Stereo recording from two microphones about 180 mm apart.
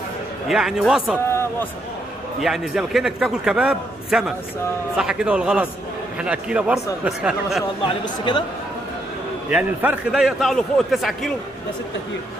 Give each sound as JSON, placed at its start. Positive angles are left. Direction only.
{"t": 0.5, "sound": "a man's voice", "side_deg": 0}
{"t": 2.4, "sound": "a man's voice", "side_deg": -5}
{"t": 8.0, "sound": "speech", "side_deg": 25}
{"t": 9.5, "sound": "a man's voice", "side_deg": -5}